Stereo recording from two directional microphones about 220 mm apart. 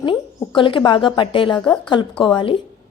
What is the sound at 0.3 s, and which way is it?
A woman's voice, 20° left (ahead or behind).